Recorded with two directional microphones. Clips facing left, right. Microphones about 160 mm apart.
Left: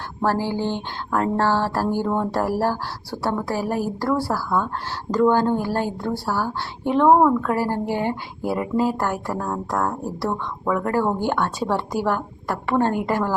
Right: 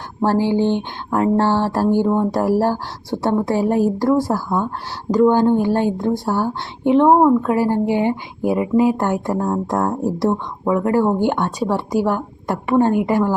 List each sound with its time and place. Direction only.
0.2 s speech: 20° right (ahead or behind)